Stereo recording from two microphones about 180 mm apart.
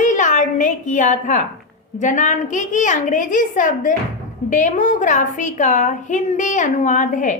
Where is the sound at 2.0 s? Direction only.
45° left (ahead or behind).